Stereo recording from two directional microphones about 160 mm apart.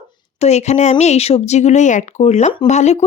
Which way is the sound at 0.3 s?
45° left (ahead or behind).